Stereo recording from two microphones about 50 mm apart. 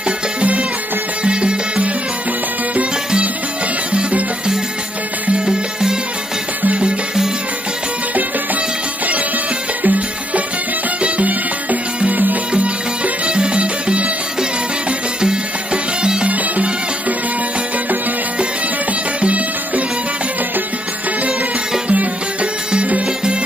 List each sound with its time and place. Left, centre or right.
0.4 s music: right
3.9 s music: centre
9.8 s music: right
12.5 s music: right
19.2 s music: right
21.8 s music: right